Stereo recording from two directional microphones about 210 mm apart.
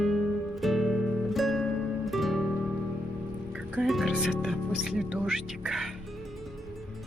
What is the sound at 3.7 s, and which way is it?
Music, centre (ahead or behind).